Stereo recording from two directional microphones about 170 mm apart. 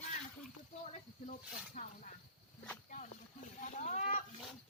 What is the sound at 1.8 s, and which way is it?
Speech, 40° left (ahead or behind).